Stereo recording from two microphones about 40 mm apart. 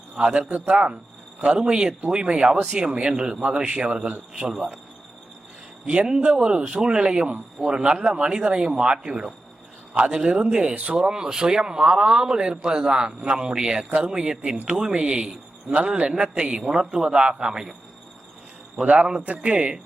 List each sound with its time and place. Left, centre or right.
0.2 s speech: right
4.4 s speech: centre
5.9 s a man's voice: right
10.9 s speech: centre
16.9 s speech: centre
18.8 s speech: right